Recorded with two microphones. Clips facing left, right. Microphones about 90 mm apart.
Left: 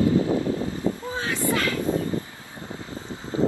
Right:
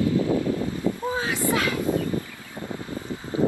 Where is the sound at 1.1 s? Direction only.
15° right (ahead or behind).